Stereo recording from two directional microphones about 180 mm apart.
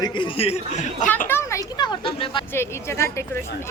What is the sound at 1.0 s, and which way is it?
A man's voice, 10° left (ahead or behind).